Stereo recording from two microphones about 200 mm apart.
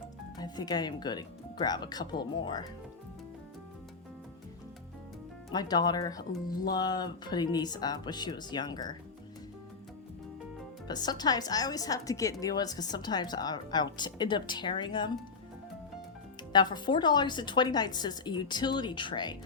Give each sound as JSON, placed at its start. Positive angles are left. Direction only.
{"t": 0.3, "sound": "a woman's voice", "side_deg": 20}
{"t": 5.5, "sound": "a woman's voice", "side_deg": 20}
{"t": 10.8, "sound": "a woman's voice", "side_deg": 20}
{"t": 16.5, "sound": "a woman's voice", "side_deg": 20}